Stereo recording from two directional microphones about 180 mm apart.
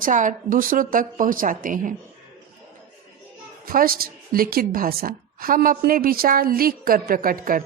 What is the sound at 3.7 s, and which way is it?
A woman's voice, 50° right (ahead or behind).